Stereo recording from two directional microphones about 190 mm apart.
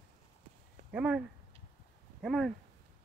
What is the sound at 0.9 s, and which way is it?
Speech, 5° right (ahead or behind).